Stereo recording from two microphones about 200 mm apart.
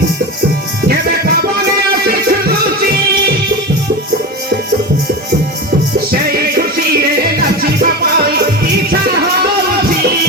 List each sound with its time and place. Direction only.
0.9 s music: 50° right (ahead or behind)
6.6 s music: 50° right (ahead or behind)